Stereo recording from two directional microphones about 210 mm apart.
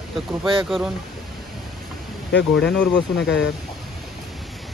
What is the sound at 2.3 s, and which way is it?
Speech, 55° left (ahead or behind).